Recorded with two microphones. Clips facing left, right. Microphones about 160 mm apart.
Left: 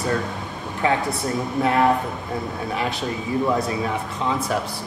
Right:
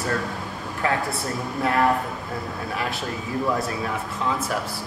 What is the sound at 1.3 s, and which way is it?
Speech, 20° left (ahead or behind).